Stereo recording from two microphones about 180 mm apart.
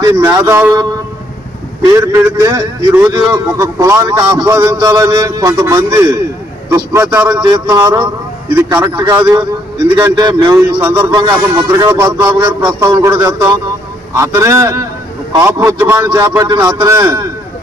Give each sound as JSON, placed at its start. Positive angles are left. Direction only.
{"t": 0.5, "sound": "a man's voice", "side_deg": -10}
{"t": 2.0, "sound": "a man's voice", "side_deg": -20}